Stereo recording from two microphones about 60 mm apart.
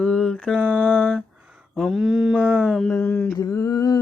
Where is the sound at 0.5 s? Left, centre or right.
Right.